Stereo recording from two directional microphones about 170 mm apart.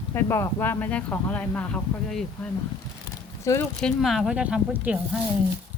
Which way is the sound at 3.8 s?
Centre (ahead or behind).